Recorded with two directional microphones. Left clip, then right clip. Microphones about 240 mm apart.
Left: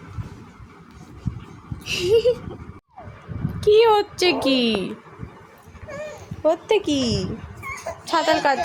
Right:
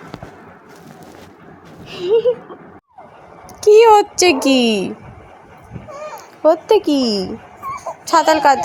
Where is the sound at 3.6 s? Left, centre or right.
Centre.